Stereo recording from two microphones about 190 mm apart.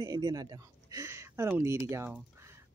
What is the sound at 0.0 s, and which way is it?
Speech, 20° right (ahead or behind).